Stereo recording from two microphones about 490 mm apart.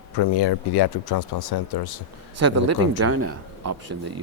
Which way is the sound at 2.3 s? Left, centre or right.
Right.